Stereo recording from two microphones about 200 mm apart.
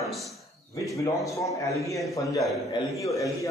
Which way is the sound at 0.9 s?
15° left (ahead or behind).